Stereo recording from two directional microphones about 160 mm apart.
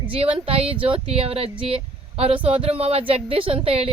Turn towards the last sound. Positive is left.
turn(degrees=-35)  # may be behind; listen again after turning